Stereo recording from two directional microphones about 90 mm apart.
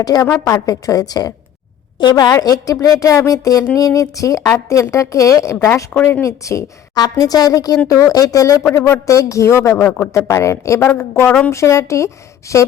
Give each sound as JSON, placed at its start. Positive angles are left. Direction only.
{"t": 0.0, "sound": "a woman's voice", "side_deg": 45}
{"t": 2.0, "sound": "a woman's voice", "side_deg": 55}
{"t": 2.4, "sound": "a woman's voice", "side_deg": 45}
{"t": 5.5, "sound": "a woman's voice", "side_deg": 25}
{"t": 6.2, "sound": "a woman's voice", "side_deg": 35}
{"t": 8.7, "sound": "a woman's voice", "side_deg": 25}
{"t": 9.0, "sound": "a woman's voice", "side_deg": 35}